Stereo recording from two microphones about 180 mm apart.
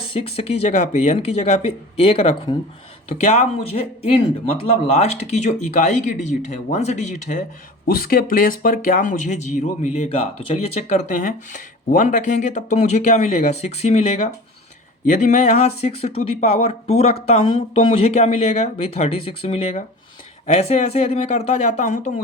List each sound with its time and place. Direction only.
0.1 s speech: 35° left (ahead or behind)
7.9 s speech: 55° left (ahead or behind)